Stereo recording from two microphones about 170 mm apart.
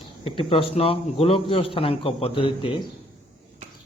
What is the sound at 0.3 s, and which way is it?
A man's voice, 30° left (ahead or behind).